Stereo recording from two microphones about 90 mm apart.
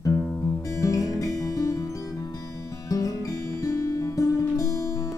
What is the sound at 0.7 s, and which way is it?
Music, 40° left (ahead or behind).